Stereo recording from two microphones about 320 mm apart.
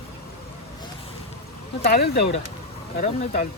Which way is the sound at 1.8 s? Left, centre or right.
Left.